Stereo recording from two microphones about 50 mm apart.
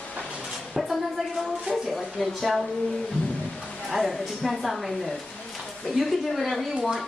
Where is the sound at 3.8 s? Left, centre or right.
Centre.